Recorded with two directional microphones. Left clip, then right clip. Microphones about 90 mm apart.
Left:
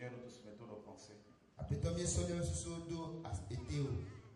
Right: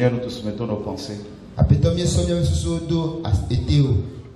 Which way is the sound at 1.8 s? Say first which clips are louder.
Right 16 dB; 30° right (ahead or behind).